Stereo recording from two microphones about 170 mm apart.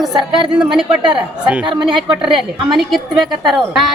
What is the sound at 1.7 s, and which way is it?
Speech, 30° right (ahead or behind).